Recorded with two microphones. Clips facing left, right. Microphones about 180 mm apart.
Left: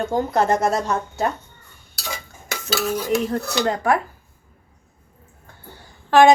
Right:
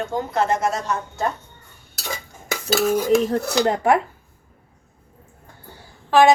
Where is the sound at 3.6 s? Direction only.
25° right (ahead or behind).